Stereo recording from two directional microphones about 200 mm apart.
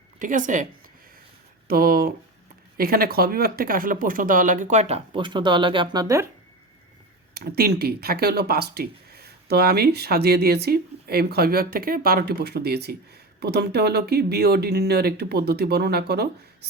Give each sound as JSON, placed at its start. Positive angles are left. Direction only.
{"t": 0.2, "sound": "speech", "side_deg": -40}
{"t": 7.3, "sound": "speech", "side_deg": -50}